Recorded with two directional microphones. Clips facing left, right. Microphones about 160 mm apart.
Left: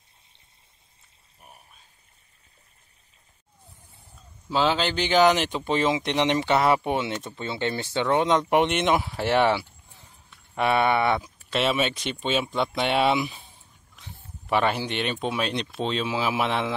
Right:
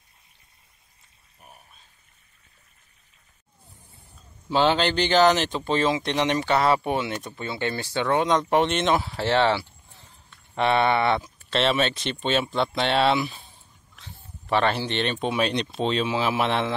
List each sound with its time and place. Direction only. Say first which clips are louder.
1.4 s pour: right 1 dB; 10° left (ahead or behind)
4.5 s a man's voice: right 2 dB; centre (ahead or behind)